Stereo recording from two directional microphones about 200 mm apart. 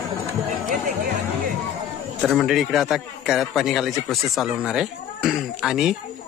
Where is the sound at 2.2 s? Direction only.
Centre (ahead or behind).